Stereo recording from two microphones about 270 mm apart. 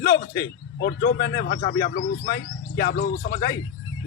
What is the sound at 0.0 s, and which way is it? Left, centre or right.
Speech, left.